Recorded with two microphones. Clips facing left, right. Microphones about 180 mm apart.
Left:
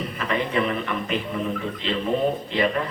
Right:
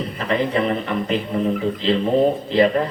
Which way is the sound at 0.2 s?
35° right (ahead or behind).